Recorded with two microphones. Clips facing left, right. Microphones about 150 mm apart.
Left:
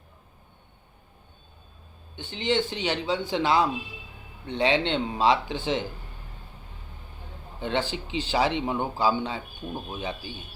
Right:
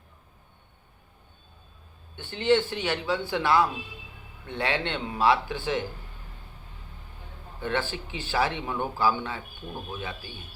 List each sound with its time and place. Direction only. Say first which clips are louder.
2.1 s speech: right 3 dB; 15° left (ahead or behind)
7.6 s speech: left 2 dB; 20° left (ahead or behind)